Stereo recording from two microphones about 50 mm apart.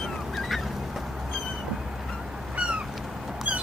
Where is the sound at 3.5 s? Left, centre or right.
Right.